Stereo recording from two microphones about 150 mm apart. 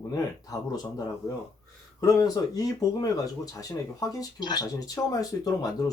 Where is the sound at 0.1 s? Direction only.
25° left (ahead or behind).